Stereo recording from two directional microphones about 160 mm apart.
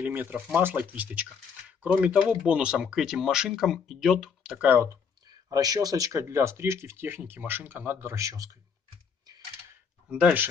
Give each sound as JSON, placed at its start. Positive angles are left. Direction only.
{"t": 0.0, "sound": "speech", "side_deg": -10}
{"t": 10.1, "sound": "speech", "side_deg": -10}